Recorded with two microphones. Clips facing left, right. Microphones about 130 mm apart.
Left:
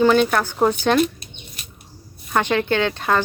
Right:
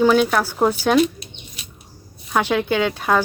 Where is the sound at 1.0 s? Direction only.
50° left (ahead or behind).